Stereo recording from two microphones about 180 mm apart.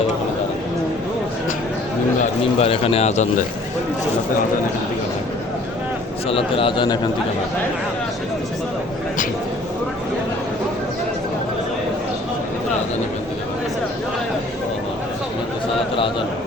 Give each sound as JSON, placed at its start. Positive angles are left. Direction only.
{"t": 2.6, "sound": "speech", "side_deg": 35}
{"t": 6.2, "sound": "a man's voice", "side_deg": 30}